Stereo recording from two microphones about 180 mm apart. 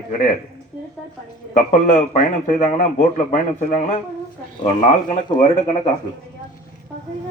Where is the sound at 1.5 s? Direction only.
45° left (ahead or behind).